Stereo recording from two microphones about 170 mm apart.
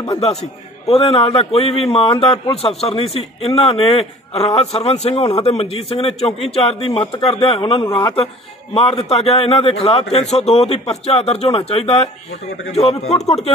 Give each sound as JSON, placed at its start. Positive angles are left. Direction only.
{"t": 0.2, "sound": "a man's voice", "side_deg": 35}